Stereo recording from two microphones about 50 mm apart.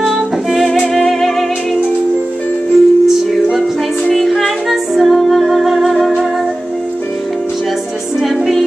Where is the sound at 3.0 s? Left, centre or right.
Centre.